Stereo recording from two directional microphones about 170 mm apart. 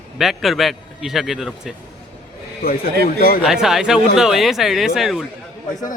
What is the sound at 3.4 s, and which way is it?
A man's voice, 5° right (ahead or behind).